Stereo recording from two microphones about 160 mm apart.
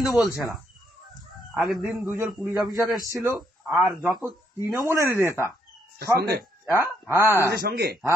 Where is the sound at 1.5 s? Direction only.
Centre (ahead or behind).